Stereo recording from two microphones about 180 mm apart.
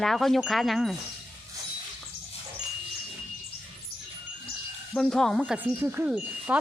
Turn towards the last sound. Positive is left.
turn(degrees=-5)  # may be behind; listen again after turning